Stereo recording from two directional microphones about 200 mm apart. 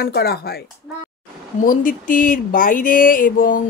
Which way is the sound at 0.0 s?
50° left (ahead or behind).